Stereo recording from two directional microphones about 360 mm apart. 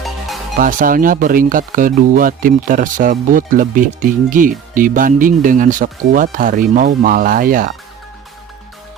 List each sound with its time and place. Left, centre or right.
0.6 s speech: right